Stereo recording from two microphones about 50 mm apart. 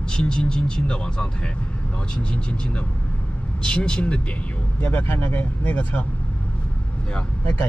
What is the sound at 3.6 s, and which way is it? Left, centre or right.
Speech, centre.